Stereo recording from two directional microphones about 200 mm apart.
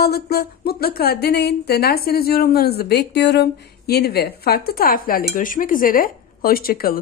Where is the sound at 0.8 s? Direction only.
50° left (ahead or behind).